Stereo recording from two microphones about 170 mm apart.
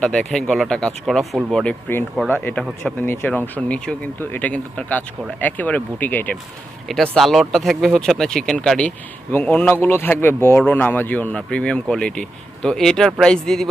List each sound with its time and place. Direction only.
0.0 s speech: 5° left (ahead or behind)
2.4 s speech: 10° left (ahead or behind)